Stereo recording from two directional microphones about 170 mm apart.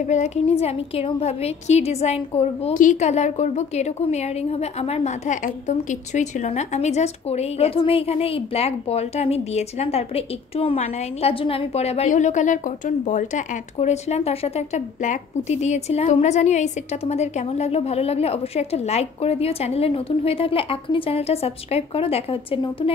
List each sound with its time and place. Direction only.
0.0 s a woman's voice: 45° left (ahead or behind)
2.7 s a woman's voice: 50° left (ahead or behind); by 22.9 s 30° left (ahead or behind)